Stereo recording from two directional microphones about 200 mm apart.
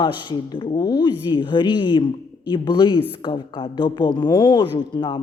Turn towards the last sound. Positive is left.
turn(degrees=25)  # may be behind; listen again after turning